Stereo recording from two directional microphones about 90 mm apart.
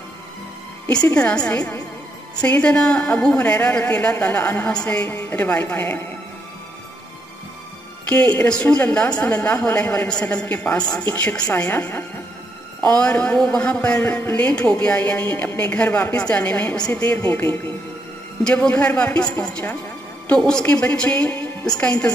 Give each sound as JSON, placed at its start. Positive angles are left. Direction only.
{"t": 1.0, "sound": "a woman's voice", "side_deg": 15}
{"t": 8.1, "sound": "a woman's voice", "side_deg": 20}
{"t": 20.3, "sound": "a woman's voice", "side_deg": 10}